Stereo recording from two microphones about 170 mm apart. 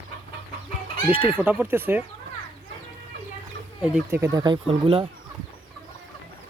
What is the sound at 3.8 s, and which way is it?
Speech, 10° right (ahead or behind).